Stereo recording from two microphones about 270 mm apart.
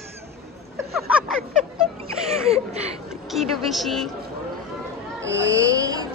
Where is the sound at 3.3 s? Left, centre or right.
Centre.